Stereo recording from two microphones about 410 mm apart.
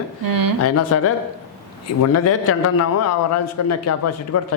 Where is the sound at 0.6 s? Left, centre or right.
Left.